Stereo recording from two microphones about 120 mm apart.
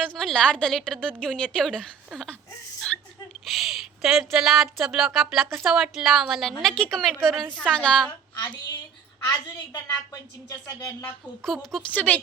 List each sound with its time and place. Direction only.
0.1 s a woman's voice: 5° left (ahead or behind)
2.9 s a sound: 5° left (ahead or behind)
3.4 s a woman's voice: centre (ahead or behind)
10.7 s speech: 30° left (ahead or behind)
11.4 s a woman's voice: 5° left (ahead or behind)